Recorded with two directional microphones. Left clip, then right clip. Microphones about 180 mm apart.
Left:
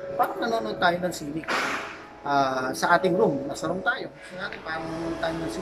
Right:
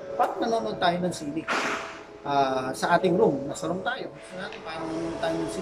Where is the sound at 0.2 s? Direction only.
Centre (ahead or behind).